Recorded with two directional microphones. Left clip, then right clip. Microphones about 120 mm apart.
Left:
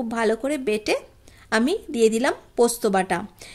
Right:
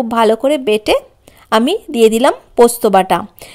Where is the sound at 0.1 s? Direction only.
40° right (ahead or behind).